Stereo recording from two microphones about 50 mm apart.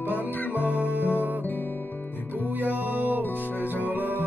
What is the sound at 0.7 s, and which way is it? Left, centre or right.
Music, right.